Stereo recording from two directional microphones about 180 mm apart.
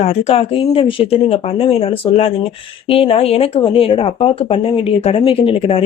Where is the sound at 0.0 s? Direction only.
35° left (ahead or behind).